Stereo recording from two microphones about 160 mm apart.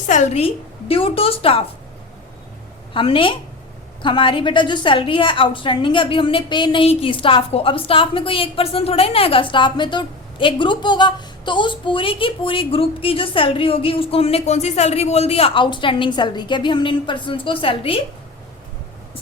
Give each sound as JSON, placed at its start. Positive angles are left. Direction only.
{"t": 0.1, "sound": "a woman's voice", "side_deg": 45}
{"t": 2.9, "sound": "a woman's voice", "side_deg": 35}